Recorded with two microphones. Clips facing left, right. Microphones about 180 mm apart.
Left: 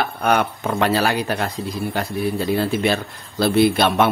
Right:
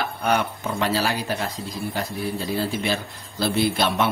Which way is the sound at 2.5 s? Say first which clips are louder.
Left 5 dB; 60° left (ahead or behind).